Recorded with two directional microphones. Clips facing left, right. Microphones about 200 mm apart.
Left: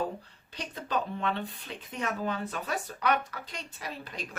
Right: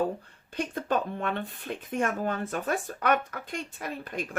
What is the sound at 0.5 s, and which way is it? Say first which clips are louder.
Speech: right 5 dB; 50° right (ahead or behind).